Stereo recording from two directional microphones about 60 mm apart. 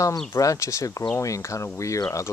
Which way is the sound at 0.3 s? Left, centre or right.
Left.